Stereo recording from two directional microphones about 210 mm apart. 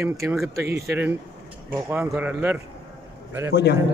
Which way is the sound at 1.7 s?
10° right (ahead or behind).